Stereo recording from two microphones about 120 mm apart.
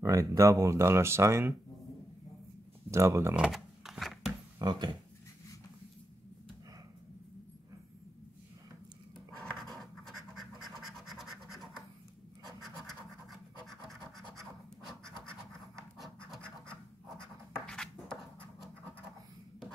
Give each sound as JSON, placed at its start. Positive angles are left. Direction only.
{"t": 0.0, "sound": "speech", "side_deg": -25}
{"t": 2.9, "sound": "speech", "side_deg": -25}
{"t": 3.3, "sound": "a sound", "side_deg": -5}
{"t": 4.6, "sound": "speech", "side_deg": -35}
{"t": 9.4, "sound": "scratch", "side_deg": 5}
{"t": 16.0, "sound": "scratch", "side_deg": 5}
{"t": 17.6, "sound": "a sound", "side_deg": 5}